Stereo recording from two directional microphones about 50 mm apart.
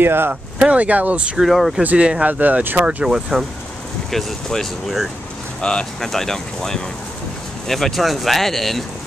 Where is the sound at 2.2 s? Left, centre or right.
Right.